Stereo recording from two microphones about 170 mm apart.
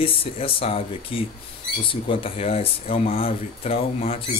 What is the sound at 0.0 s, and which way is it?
Speech, 35° left (ahead or behind).